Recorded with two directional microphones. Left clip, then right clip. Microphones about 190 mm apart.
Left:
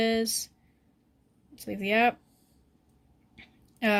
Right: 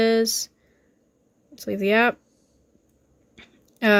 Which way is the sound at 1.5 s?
45° right (ahead or behind).